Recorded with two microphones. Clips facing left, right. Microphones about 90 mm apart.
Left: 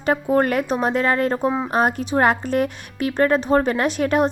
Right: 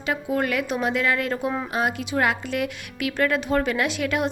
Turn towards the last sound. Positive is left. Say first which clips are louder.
# left 5 dB
turn(degrees=40)  # may be behind; listen again after turning